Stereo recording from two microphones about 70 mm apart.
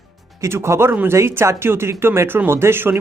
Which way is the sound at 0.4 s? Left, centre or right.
Right.